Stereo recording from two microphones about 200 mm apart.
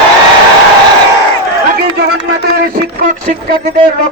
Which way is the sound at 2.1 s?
55° right (ahead or behind).